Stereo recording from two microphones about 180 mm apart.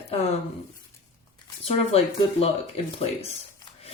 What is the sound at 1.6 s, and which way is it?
Speech, 35° left (ahead or behind).